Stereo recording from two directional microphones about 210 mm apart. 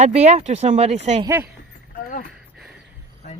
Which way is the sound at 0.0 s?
30° right (ahead or behind).